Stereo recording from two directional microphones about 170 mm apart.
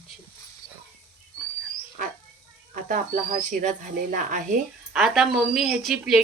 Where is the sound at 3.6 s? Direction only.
50° right (ahead or behind).